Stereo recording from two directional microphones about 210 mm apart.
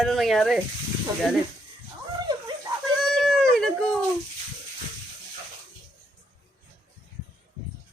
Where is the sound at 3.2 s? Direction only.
Centre (ahead or behind).